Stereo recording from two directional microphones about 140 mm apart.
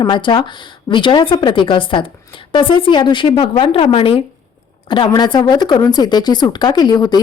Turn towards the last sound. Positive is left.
turn(degrees=30)  # may be behind; listen again after turning